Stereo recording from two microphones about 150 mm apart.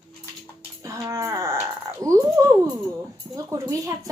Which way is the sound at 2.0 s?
20° right (ahead or behind).